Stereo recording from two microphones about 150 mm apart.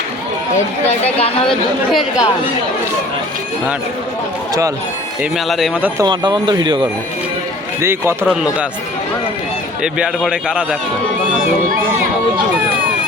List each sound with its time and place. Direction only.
0.9 s speech: 45° left (ahead or behind)
1.5 s a man's voice: centre (ahead or behind)
5.2 s a man's voice: centre (ahead or behind)
6.0 s speech: 30° right (ahead or behind)
7.8 s a man's voice: 15° right (ahead or behind)
9.8 s a man's voice: 5° right (ahead or behind)